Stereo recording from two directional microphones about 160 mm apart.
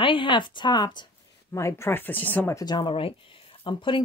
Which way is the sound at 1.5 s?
15° left (ahead or behind).